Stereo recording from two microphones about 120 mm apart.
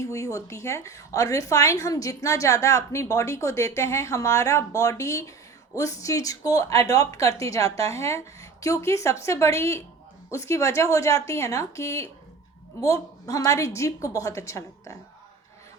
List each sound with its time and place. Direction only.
0.0 s a woman's voice: 25° left (ahead or behind)